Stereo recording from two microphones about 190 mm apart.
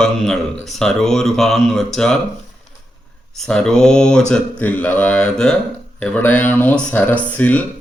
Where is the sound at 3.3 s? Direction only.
5° left (ahead or behind).